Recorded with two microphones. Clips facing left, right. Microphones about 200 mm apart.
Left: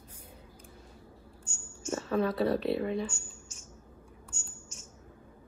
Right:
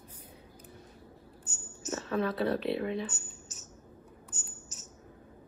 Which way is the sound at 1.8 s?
5° right (ahead or behind).